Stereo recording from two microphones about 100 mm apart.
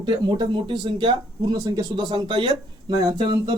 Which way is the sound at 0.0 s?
45° right (ahead or behind).